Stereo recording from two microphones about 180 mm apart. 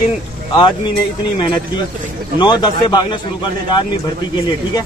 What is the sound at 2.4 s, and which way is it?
Speech, 25° left (ahead or behind).